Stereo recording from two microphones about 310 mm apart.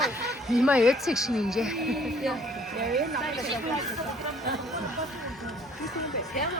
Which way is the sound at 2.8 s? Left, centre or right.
Centre.